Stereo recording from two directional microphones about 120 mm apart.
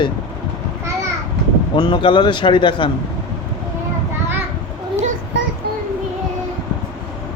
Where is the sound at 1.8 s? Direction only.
40° left (ahead or behind).